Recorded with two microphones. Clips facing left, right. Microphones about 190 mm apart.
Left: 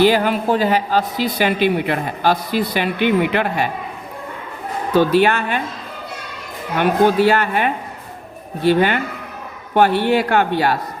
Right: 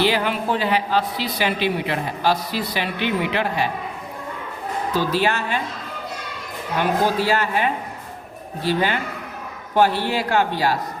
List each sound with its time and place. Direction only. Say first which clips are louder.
0.0 s speech: left 6 dB; 45° left (ahead or behind)
4.9 s a man's voice: left 8 dB; 60° left (ahead or behind)
6.7 s a man's voice: left 6 dB; 60° left (ahead or behind)